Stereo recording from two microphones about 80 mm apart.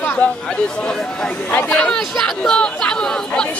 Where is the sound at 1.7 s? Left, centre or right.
Centre.